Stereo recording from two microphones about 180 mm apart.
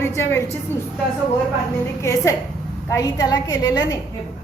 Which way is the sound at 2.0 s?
15° left (ahead or behind).